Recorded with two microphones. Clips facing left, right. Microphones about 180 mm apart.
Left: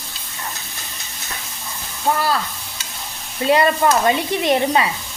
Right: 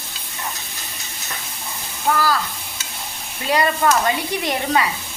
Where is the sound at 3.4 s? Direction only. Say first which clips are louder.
Left 3 dB; 25° left (ahead or behind).